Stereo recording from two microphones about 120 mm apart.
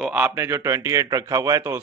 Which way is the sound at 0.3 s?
25° right (ahead or behind).